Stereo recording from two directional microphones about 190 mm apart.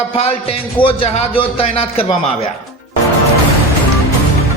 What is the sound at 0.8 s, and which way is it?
Speech, 30° left (ahead or behind).